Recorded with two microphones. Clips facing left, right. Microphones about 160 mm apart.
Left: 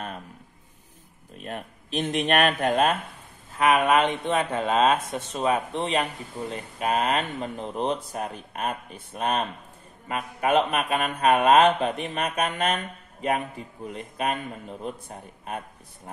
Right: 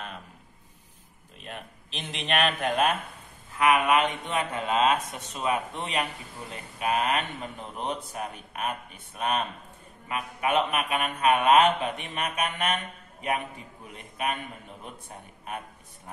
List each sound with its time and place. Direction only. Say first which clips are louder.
1.4 s speech: left 6 dB; 45° left (ahead or behind)
3.5 s speech: left 2 dB; 30° left (ahead or behind)
13.9 s speech: left 3 dB; 35° left (ahead or behind)